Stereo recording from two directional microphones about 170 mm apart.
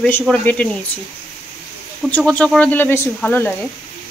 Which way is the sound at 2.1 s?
5° left (ahead or behind).